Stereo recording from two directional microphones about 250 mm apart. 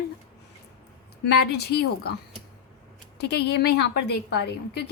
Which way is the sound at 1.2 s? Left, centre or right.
Left.